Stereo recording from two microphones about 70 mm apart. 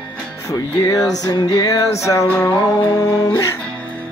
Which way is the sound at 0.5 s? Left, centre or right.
Left.